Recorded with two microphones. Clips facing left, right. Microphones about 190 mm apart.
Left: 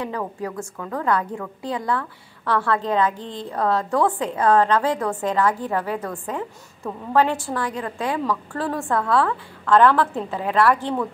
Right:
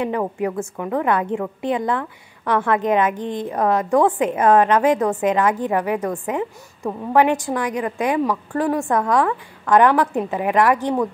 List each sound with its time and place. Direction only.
0.0 s a woman's voice: 20° right (ahead or behind)